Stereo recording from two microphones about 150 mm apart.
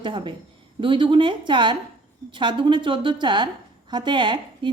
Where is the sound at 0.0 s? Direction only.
30° right (ahead or behind).